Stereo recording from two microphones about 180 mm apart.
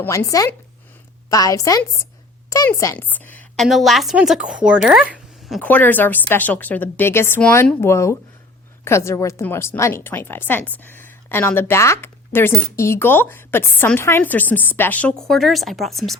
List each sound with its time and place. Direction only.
0.0 s a woman's voice: 15° left (ahead or behind); by 5.5 s 5° right (ahead or behind)
5.5 s a woman's voice: 10° left (ahead or behind)